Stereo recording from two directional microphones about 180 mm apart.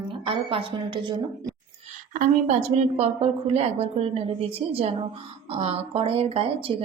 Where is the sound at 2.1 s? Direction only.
40° right (ahead or behind).